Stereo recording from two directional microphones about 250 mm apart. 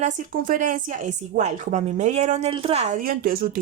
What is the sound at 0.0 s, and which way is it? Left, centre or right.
Speech, right.